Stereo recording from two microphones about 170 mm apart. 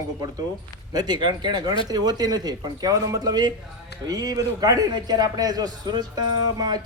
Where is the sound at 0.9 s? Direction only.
25° right (ahead or behind).